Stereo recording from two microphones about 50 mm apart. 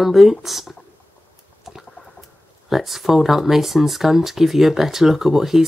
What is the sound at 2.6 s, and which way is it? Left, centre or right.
Speech, centre.